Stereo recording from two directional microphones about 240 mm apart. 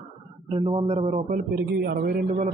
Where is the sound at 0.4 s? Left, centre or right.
Right.